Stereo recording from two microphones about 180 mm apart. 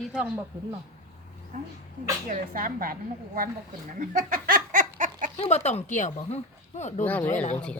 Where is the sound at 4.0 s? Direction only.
50° right (ahead or behind).